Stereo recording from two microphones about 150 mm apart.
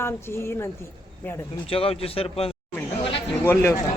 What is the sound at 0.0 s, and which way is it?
Speech, 15° left (ahead or behind).